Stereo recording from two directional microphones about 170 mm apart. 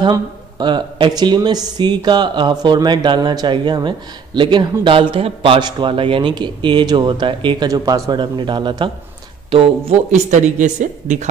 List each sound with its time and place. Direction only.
0.0 s speech: 25° right (ahead or behind); by 11.2 s 45° right (ahead or behind)